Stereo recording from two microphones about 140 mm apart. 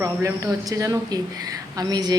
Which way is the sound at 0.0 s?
20° right (ahead or behind).